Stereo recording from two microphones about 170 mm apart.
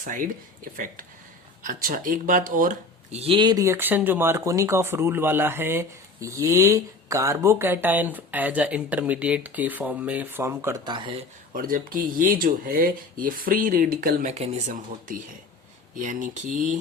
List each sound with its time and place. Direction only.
0.0 s speech: 50° right (ahead or behind)
1.6 s speech: 55° right (ahead or behind)
3.2 s speech: 30° right (ahead or behind); by 10.9 s 15° right (ahead or behind)
10.9 s speech: 30° right (ahead or behind)
11.5 s speech: 55° right (ahead or behind)
14.3 s speech: 45° right (ahead or behind)